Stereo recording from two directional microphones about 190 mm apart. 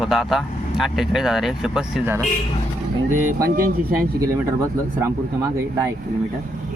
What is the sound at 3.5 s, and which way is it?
Speech, 50° right (ahead or behind).